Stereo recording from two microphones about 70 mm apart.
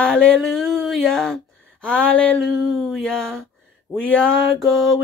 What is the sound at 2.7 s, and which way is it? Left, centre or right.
Music, centre.